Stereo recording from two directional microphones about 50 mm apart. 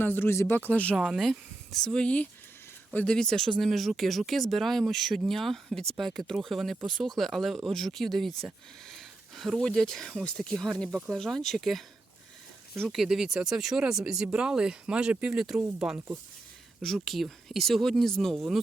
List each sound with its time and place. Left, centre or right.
0.0 s speech: left
0.5 s speech: left
0.9 s speech: centre
3.1 s speech: centre
3.7 s speech: centre
8.9 s a sound: centre
9.6 s speech: centre
12.9 s speech: centre; by 15.4 s right
15.4 s speech: centre
16.8 s speech: centre